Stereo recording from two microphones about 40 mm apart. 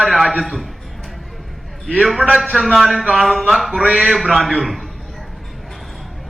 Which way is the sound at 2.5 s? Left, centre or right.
Centre.